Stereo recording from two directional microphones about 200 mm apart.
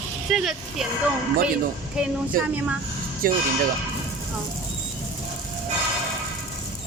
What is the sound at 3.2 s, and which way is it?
Speech, 45° right (ahead or behind).